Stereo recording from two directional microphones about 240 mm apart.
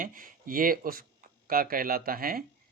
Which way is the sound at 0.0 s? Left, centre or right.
Right.